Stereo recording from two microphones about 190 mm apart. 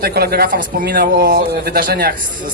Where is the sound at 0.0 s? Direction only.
55° right (ahead or behind).